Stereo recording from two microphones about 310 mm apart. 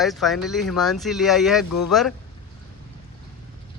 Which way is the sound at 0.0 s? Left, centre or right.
Centre.